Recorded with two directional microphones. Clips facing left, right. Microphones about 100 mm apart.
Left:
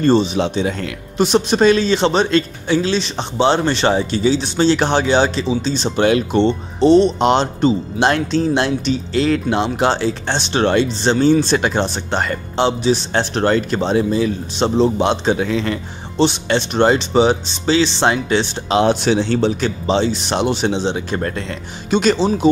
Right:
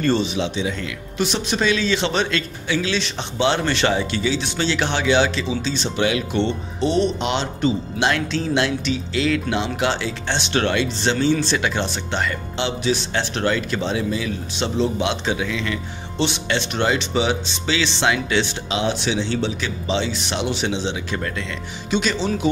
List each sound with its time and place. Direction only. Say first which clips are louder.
0.0 s speech: left 6 dB; 35° left (ahead or behind)
18.8 s speech: left 8 dB; 45° left (ahead or behind)